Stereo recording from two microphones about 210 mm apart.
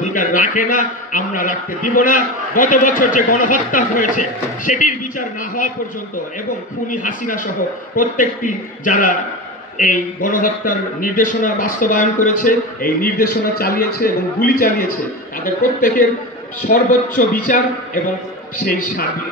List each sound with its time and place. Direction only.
0.0 s a man's voice: 40° left (ahead or behind)
6.9 s a man's voice: 40° left (ahead or behind)
18.6 s a man's voice: 45° left (ahead or behind)